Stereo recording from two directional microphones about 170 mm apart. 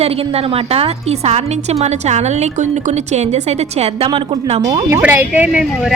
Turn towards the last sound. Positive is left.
turn(degrees=-5)  # may be behind; listen again after turning